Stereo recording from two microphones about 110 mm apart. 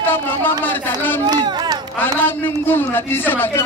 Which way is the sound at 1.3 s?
40° right (ahead or behind).